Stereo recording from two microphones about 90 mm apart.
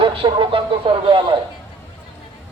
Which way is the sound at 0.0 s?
70° right (ahead or behind).